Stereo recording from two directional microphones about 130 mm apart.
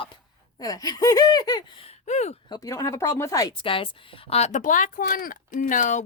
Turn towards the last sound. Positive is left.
turn(degrees=80)